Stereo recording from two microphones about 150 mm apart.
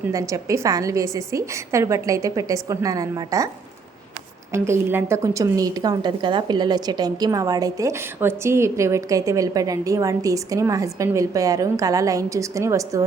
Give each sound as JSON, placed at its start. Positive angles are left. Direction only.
{"t": 0.1, "sound": "a woman's voice", "side_deg": -20}
{"t": 4.5, "sound": "a woman's voice", "side_deg": -20}